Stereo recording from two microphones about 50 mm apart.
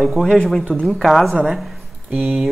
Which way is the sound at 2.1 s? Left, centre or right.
Right.